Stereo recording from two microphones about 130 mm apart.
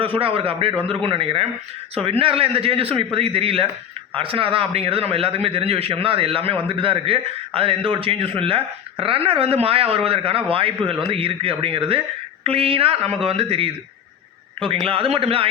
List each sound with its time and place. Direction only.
0.0 s a man's voice: 45° right (ahead or behind)
14.8 s a man's voice: 45° right (ahead or behind)